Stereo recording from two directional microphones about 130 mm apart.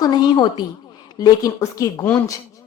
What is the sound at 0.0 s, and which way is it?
A woman's voice, 30° left (ahead or behind).